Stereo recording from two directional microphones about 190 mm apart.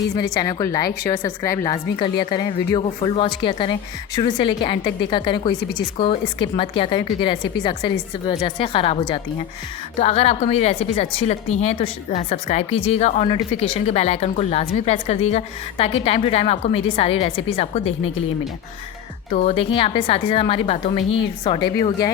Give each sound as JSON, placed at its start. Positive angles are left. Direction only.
{"t": 0.3, "sound": "a woman's voice", "side_deg": 20}
{"t": 19.3, "sound": "a woman's voice", "side_deg": 35}